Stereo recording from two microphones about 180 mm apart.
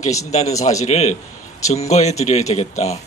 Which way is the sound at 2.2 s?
40° left (ahead or behind).